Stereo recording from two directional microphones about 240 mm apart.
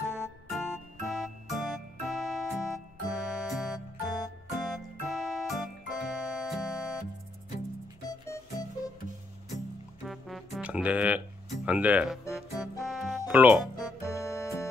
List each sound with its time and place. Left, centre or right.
0.1 s music: centre
8.1 s music: centre
10.0 s music: centre